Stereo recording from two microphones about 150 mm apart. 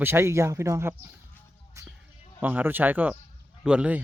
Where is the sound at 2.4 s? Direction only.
10° right (ahead or behind).